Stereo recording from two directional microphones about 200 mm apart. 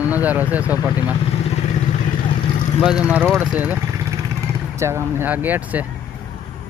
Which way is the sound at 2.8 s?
5° right (ahead or behind).